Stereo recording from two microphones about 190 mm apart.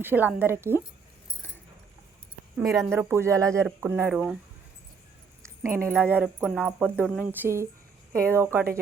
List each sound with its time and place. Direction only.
0.0 s speech: 10° right (ahead or behind)
2.6 s speech: centre (ahead or behind)
2.9 s speech: 15° right (ahead or behind)
5.4 s speech: 15° right (ahead or behind)